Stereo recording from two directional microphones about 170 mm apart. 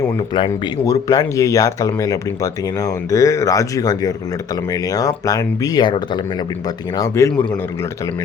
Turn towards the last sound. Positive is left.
turn(degrees=20)  # may be behind; listen again after turning